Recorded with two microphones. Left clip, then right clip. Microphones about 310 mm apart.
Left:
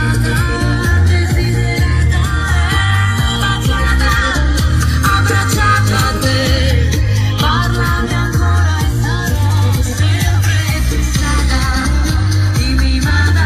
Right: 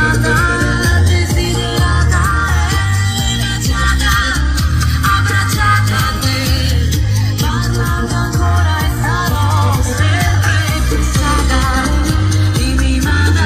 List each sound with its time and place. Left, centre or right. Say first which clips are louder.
0.0 s music: right 5 dB; centre
5.0 s music: even; left
11.2 s music: right 3 dB; right